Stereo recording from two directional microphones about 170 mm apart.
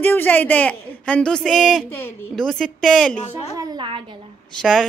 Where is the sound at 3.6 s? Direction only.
30° right (ahead or behind).